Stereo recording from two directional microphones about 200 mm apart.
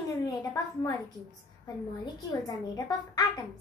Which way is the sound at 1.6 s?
20° left (ahead or behind).